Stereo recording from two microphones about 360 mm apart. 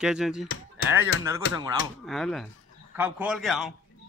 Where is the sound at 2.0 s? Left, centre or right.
Centre.